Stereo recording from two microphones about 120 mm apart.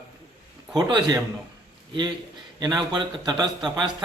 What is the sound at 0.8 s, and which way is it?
Speech, 35° right (ahead or behind).